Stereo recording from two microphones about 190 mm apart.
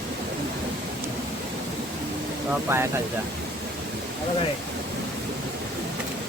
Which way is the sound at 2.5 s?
15° right (ahead or behind).